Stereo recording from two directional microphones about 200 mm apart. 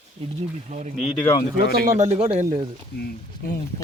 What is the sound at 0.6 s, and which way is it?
Speech, 35° right (ahead or behind).